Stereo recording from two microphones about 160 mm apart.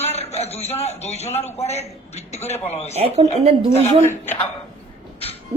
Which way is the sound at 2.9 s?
40° right (ahead or behind).